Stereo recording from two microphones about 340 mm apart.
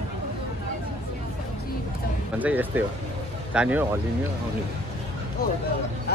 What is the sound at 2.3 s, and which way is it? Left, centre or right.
Speech, centre.